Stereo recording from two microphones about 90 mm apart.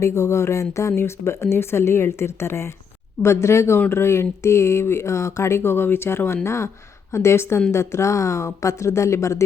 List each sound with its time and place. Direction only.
0.0 s speech: 30° left (ahead or behind)